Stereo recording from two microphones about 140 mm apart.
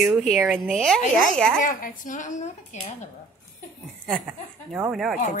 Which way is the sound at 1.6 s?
70° left (ahead or behind).